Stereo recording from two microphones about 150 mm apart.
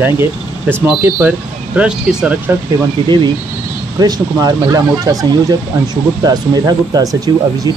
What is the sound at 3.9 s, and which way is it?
Speech, 25° right (ahead or behind).